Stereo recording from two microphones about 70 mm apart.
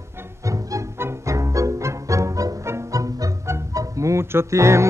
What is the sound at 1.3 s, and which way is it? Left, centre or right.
Music, right.